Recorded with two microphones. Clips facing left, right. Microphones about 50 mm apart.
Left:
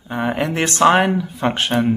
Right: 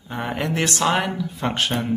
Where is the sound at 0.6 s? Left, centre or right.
Left.